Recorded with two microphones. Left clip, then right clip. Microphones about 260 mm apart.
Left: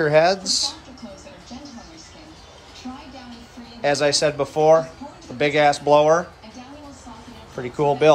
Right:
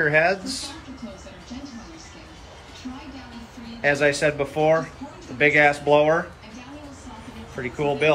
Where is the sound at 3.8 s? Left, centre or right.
Centre.